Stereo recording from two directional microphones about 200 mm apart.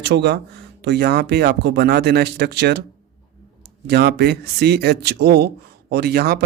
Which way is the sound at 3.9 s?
55° right (ahead or behind).